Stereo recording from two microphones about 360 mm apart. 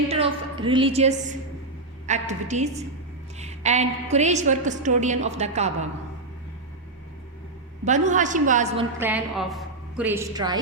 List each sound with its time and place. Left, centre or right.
0.1 s a woman's voice: centre
7.9 s a woman's voice: centre